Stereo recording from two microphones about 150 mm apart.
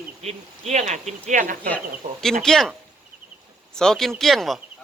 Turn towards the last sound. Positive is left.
turn(degrees=0)  # may be behind; listen again after turning